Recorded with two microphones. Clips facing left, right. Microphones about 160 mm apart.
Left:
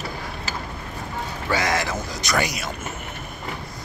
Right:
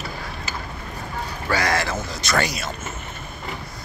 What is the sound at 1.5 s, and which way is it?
Speech, 20° left (ahead or behind).